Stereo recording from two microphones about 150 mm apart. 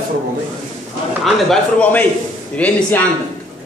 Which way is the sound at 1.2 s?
Centre (ahead or behind).